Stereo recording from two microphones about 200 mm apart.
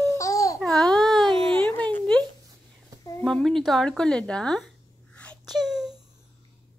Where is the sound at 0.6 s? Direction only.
Centre (ahead or behind).